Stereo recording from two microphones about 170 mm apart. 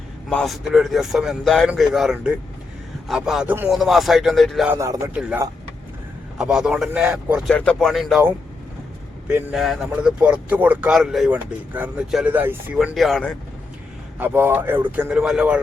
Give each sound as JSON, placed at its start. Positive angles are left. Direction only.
{"t": 0.3, "sound": "speech", "side_deg": 5}
{"t": 4.7, "sound": "speech", "side_deg": -20}
{"t": 5.1, "sound": "speech", "side_deg": -10}
{"t": 7.5, "sound": "speech", "side_deg": 5}
{"t": 9.2, "sound": "speech", "side_deg": -5}
{"t": 14.2, "sound": "speech", "side_deg": -10}